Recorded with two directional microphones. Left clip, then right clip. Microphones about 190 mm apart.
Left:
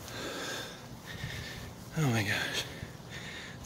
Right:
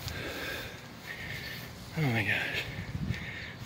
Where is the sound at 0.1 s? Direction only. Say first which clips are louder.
Even; 10° left (ahead or behind).